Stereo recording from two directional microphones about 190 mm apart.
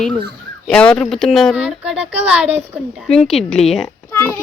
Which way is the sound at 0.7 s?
5° left (ahead or behind).